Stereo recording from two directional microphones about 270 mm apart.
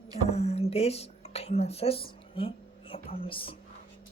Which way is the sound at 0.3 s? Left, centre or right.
Left.